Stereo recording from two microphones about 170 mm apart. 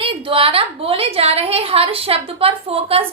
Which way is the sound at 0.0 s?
30° right (ahead or behind).